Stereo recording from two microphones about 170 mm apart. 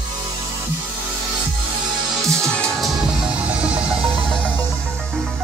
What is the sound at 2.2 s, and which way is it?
Music, 15° right (ahead or behind).